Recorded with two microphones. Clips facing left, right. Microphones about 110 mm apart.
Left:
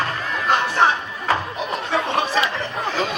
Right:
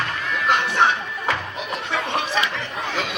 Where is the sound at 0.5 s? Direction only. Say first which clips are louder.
Left 2 dB; 35° left (ahead or behind).